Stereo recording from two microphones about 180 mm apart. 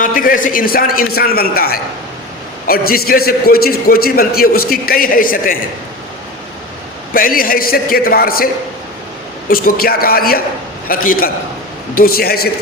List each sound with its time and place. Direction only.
0.0 s a man's voice: 50° left (ahead or behind)
7.1 s a man's voice: 50° left (ahead or behind)
9.5 s a man's voice: 55° left (ahead or behind)